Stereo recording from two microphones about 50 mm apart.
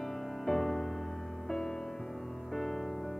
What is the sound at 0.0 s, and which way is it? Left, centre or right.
Music, centre.